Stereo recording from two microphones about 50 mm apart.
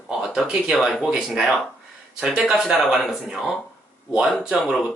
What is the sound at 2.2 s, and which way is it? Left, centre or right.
Speech, centre.